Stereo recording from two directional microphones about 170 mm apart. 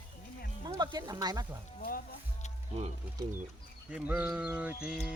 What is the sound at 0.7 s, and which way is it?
Speech, 25° right (ahead or behind).